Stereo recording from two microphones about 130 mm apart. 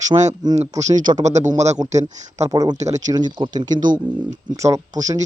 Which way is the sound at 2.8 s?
60° right (ahead or behind).